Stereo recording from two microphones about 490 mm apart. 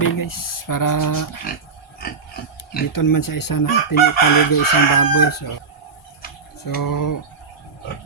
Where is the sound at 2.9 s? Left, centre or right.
Left.